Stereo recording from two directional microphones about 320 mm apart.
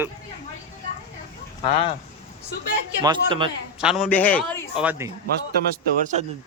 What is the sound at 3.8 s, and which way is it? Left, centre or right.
A man's voice, centre.